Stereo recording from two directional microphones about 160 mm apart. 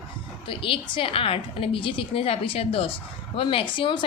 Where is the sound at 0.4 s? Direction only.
35° left (ahead or behind).